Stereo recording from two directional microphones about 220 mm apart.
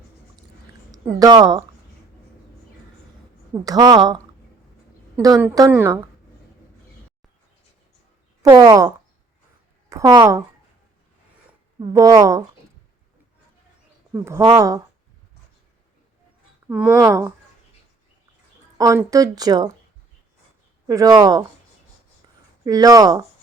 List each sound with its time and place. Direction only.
0.9 s speech: 15° right (ahead or behind)
3.6 s a woman's voice: 15° right (ahead or behind)
8.4 s a woman's voice: 15° right (ahead or behind)
9.9 s a woman's voice: 15° right (ahead or behind)
11.9 s a woman's voice: 15° right (ahead or behind)
14.1 s a woman's voice: 15° right (ahead or behind)
16.6 s a woman's voice: 5° right (ahead or behind)
18.8 s a woman's voice: 15° right (ahead or behind)
20.8 s a woman's voice: 15° right (ahead or behind)
22.6 s a woman's voice: 15° right (ahead or behind)